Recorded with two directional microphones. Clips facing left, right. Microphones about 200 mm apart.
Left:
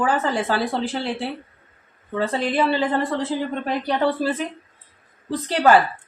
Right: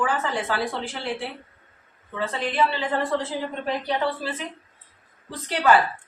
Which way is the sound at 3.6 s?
45° left (ahead or behind).